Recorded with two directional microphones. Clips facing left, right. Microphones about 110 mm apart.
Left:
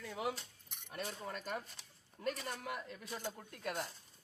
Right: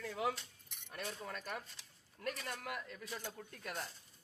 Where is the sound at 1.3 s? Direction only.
20° left (ahead or behind).